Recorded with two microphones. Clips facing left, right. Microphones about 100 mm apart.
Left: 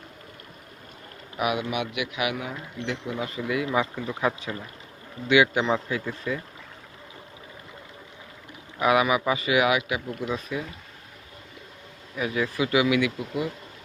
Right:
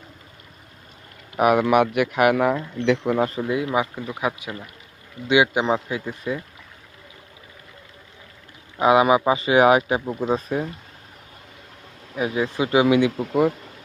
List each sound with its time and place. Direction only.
1.4 s speech: 45° right (ahead or behind)
2.3 s speech: 80° right
3.2 s speech: 40° right (ahead or behind)
3.4 s speech: 25° right (ahead or behind)
8.8 s speech: 25° right (ahead or behind)
12.1 s speech: 25° right (ahead or behind)